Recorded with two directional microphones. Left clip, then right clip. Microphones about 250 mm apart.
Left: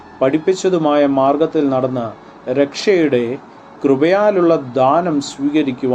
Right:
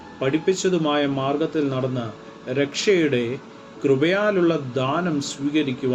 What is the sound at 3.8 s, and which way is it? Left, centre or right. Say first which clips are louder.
Speech: left 7 dB; centre.